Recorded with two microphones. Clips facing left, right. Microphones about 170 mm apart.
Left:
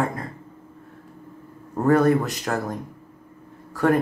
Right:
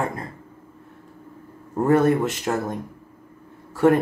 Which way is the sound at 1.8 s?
25° right (ahead or behind).